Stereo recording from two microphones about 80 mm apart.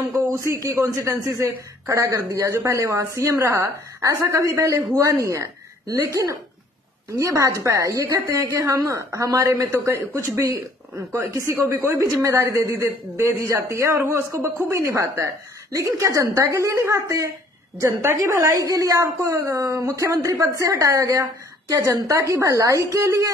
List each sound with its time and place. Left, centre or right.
0.6 s a woman's voice: right